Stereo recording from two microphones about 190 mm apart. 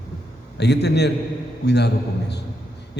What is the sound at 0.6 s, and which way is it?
A man's voice, 60° left (ahead or behind).